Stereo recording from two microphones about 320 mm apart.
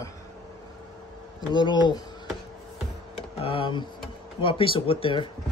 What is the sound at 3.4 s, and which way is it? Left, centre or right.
Speech, centre.